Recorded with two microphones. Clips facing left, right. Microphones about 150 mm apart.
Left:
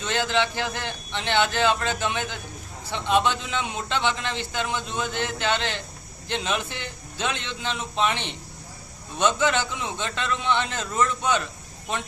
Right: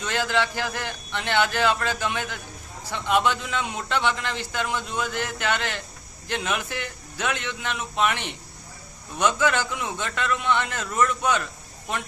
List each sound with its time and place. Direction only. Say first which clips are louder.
0.0 s a man's voice: even; 20° left (ahead or behind)